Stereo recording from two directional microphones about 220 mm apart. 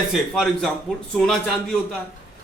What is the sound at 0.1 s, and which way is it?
Speech, centre (ahead or behind).